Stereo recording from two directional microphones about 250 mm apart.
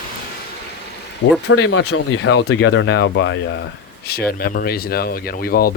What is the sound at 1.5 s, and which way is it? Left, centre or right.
Speech, left.